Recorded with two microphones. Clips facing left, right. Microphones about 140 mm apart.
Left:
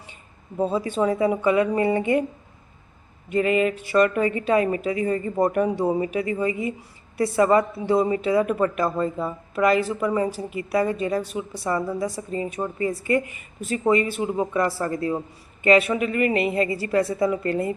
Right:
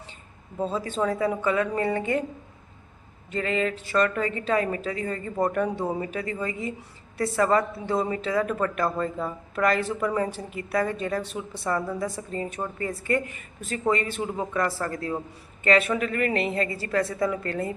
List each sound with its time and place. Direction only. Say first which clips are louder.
0.5 s a woman's voice: left 5 dB; 15° left (ahead or behind)
3.2 s a woman's voice: left 6 dB; 15° left (ahead or behind)